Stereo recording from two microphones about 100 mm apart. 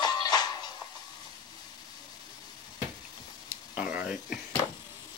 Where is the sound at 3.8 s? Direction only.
10° right (ahead or behind).